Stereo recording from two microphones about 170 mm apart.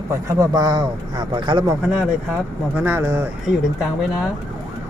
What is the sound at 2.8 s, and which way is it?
Speech, 10° right (ahead or behind).